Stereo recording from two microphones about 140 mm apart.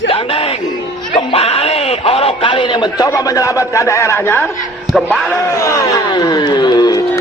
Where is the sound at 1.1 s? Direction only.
45° left (ahead or behind).